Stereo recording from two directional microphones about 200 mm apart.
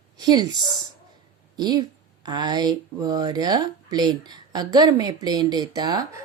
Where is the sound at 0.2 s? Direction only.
20° right (ahead or behind).